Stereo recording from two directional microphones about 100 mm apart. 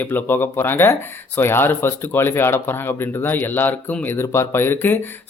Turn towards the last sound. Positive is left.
turn(degrees=20)  # may be behind; listen again after turning